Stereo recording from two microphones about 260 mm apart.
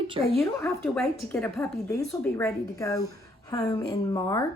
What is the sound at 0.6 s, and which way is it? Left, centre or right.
A woman's voice, centre.